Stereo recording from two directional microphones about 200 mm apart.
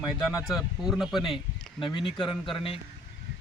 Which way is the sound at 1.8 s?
25° left (ahead or behind).